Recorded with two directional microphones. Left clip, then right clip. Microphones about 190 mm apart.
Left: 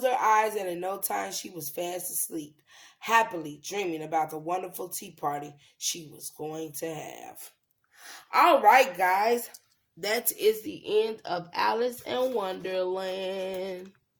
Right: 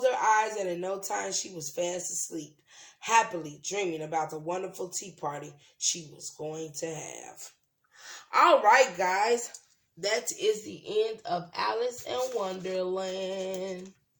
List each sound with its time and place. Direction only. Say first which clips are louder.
0.0 s speech: left 1 dB; 45° left (ahead or behind)
10.0 s speech: left 2 dB; 50° left (ahead or behind)